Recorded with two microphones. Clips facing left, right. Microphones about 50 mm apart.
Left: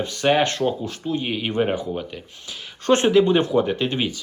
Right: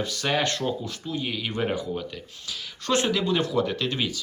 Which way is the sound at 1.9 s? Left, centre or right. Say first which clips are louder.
Left 3 dB; centre.